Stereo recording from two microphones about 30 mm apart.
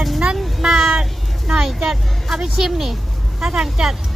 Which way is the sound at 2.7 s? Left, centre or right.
Centre.